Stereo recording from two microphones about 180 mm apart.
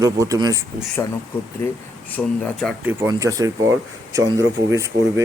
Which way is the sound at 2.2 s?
5° left (ahead or behind).